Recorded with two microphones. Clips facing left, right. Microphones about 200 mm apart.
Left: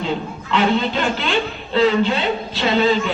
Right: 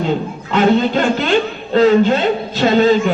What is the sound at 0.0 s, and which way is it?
A man's voice, 45° right (ahead or behind).